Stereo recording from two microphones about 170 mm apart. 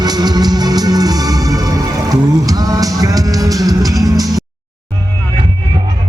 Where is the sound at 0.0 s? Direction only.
25° right (ahead or behind).